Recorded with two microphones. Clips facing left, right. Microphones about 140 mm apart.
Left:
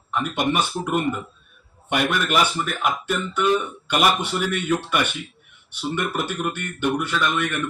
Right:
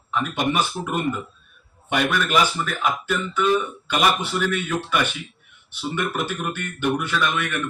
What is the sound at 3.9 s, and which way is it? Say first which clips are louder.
Speech: left 1 dB; centre (ahead or behind).